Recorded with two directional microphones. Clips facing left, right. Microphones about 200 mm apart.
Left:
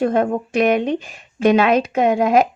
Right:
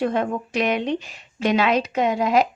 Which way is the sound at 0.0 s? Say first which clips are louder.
Left 5 dB; 45° left (ahead or behind).